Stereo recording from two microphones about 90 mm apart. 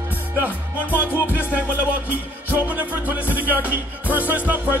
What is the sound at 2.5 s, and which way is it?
Music, 20° right (ahead or behind).